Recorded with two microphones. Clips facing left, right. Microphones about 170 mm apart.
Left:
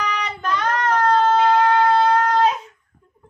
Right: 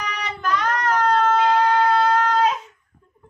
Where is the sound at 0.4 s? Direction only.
30° left (ahead or behind).